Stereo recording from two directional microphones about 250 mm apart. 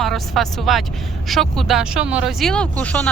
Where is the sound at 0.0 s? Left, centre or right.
Centre.